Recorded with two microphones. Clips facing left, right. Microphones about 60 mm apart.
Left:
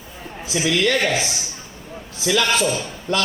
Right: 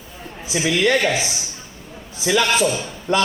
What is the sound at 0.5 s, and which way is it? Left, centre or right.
Speech, centre.